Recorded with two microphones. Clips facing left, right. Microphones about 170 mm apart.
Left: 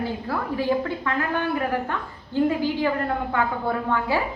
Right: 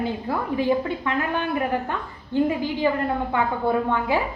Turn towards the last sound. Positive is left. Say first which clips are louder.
# right 2 dB
turn(degrees=-20)  # may be behind; listen again after turning